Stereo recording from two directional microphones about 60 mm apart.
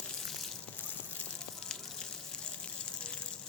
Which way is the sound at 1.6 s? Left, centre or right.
Centre.